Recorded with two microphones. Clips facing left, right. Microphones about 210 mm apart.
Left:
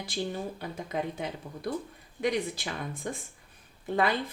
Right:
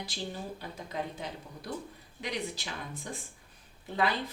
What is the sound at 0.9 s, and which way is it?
Speech, 55° left (ahead or behind).